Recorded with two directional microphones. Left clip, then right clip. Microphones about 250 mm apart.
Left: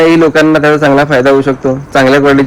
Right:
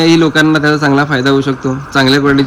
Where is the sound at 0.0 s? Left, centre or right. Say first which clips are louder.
Left 3 dB; centre.